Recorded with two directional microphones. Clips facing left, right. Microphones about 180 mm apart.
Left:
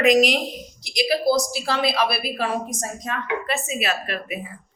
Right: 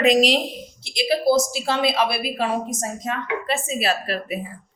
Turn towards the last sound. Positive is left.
turn(degrees=-35)  # may be behind; listen again after turning